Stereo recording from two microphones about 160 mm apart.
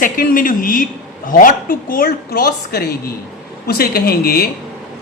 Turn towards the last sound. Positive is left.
turn(degrees=75)  # may be behind; listen again after turning